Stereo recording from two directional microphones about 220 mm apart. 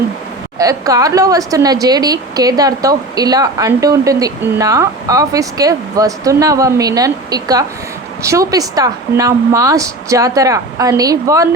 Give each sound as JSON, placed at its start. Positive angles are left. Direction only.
{"t": 0.6, "sound": "a woman's voice", "side_deg": -15}